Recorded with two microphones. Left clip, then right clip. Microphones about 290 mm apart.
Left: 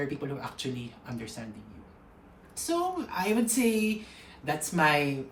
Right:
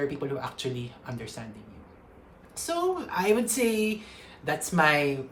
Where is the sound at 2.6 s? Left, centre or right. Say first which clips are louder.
Right 2 dB; centre.